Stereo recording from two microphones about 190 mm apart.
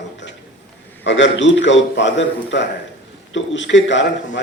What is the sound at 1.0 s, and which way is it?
A man's voice, 75° left (ahead or behind).